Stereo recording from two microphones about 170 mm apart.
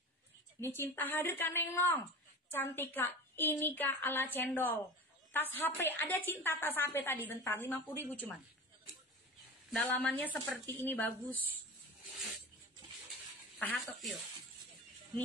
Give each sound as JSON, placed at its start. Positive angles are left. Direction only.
{"t": 0.6, "sound": "a woman's voice", "side_deg": 15}
{"t": 9.7, "sound": "a woman's voice", "side_deg": 5}
{"t": 13.6, "sound": "speech", "side_deg": 5}